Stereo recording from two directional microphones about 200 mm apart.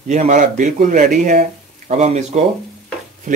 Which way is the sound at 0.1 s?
35° right (ahead or behind).